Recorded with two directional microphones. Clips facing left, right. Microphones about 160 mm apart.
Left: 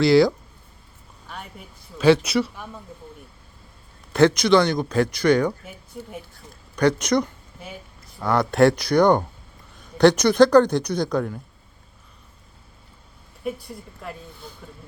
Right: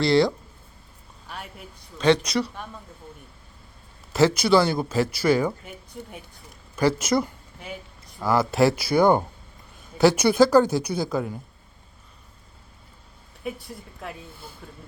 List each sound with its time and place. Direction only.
0.0 s speech: centre (ahead or behind)
2.2 s speech: 5° left (ahead or behind)
4.1 s speech: 5° right (ahead or behind)
6.7 s a sound: 5° right (ahead or behind)
8.2 s speech: centre (ahead or behind)
13.4 s speech: centre (ahead or behind)